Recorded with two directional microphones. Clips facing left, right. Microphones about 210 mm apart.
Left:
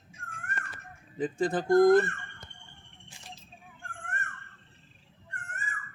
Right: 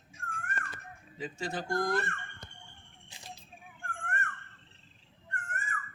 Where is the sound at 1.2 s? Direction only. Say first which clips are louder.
Left 8 dB; 50° left (ahead or behind).